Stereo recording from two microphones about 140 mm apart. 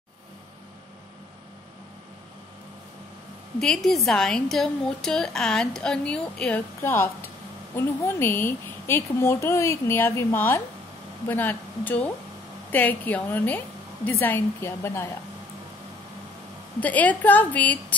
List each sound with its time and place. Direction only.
3.5 s a woman's voice: 5° left (ahead or behind)
6.8 s a woman's voice: 15° left (ahead or behind)
16.8 s a woman's voice: 10° left (ahead or behind)